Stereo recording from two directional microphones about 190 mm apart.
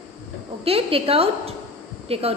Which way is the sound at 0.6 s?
30° right (ahead or behind).